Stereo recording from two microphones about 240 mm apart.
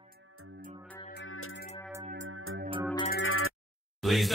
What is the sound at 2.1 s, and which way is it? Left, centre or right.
Music, right.